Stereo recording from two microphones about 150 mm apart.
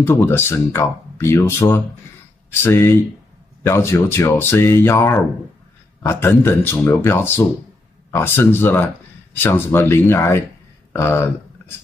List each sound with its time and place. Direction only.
0.0 s speech: 15° left (ahead or behind)